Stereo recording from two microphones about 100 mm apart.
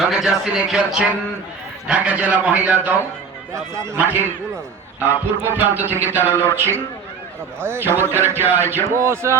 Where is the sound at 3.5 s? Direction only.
30° right (ahead or behind).